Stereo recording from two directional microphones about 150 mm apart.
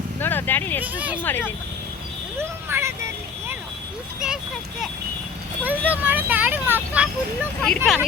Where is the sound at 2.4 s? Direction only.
15° right (ahead or behind).